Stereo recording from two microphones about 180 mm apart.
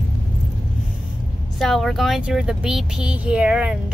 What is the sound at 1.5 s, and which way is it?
Speech, centre (ahead or behind).